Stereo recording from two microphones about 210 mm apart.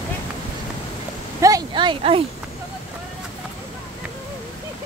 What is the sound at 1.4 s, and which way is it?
Speech, 15° right (ahead or behind).